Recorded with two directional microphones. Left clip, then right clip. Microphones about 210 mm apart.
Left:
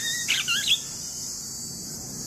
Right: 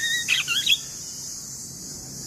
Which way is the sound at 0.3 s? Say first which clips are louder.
Right 1 dB; 20° right (ahead or behind).